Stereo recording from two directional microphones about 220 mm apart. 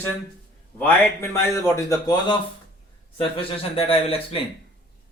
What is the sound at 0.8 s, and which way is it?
A man's voice, 10° left (ahead or behind).